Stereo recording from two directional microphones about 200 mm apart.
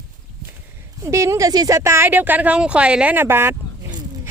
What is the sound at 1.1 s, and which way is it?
Speech, 15° right (ahead or behind).